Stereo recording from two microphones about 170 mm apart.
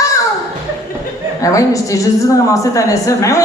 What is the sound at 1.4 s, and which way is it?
Speech, 20° left (ahead or behind).